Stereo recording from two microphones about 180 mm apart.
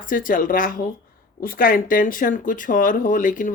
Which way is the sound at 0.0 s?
50° left (ahead or behind).